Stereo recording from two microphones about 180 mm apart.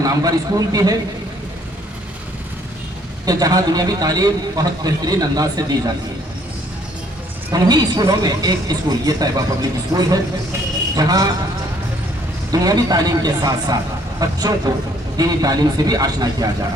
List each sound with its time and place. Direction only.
0.0 s a man's voice: 20° right (ahead or behind)
3.2 s a man's voice: 20° right (ahead or behind)
7.5 s a man's voice: 20° right (ahead or behind)
12.5 s a man's voice: 20° right (ahead or behind)